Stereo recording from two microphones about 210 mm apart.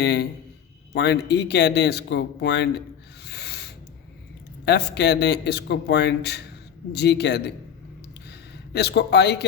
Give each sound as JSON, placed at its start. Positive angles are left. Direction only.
{"t": 0.0, "sound": "speech", "side_deg": 55}
{"t": 3.2, "sound": "owl", "side_deg": 50}
{"t": 4.6, "sound": "a man's voice", "side_deg": 55}